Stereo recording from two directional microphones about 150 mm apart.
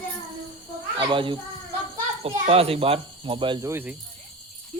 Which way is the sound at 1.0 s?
35° right (ahead or behind).